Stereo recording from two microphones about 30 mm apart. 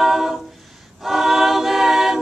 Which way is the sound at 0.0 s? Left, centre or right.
Centre.